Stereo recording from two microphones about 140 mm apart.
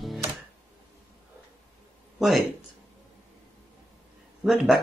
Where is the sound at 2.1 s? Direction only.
Centre (ahead or behind).